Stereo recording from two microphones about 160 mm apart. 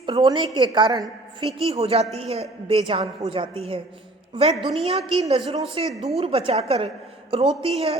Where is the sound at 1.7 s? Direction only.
40° right (ahead or behind).